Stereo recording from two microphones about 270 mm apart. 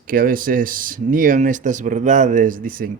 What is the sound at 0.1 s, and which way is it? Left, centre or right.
Speech, right.